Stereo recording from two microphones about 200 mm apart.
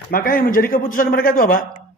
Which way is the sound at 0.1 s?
45° left (ahead or behind).